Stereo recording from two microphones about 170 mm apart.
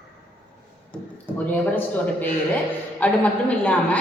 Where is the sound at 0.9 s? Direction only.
10° left (ahead or behind).